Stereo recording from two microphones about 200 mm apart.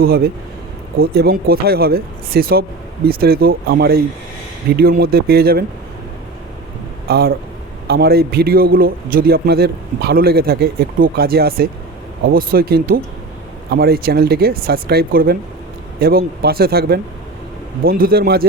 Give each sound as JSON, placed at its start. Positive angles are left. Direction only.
{"t": 0.0, "sound": "a man's voice", "side_deg": -50}
{"t": 7.1, "sound": "a man's voice", "side_deg": -50}